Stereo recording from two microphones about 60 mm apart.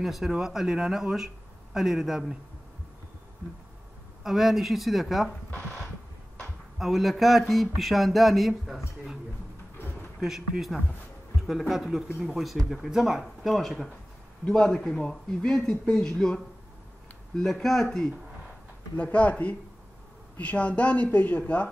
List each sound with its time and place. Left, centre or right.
0.0 s speech: centre
4.2 s speech: centre
6.8 s speech: centre
10.2 s speech: centre
18.9 s speech: left